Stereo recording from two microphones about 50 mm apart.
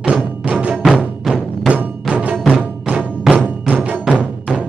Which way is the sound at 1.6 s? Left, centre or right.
Right.